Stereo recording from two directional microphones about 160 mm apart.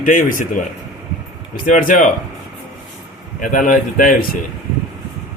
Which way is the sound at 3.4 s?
60° left (ahead or behind).